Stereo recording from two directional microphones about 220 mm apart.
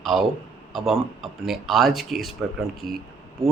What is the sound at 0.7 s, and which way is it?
Speech, centre (ahead or behind).